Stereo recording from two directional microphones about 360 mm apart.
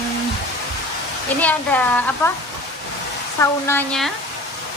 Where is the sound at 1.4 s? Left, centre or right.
Centre.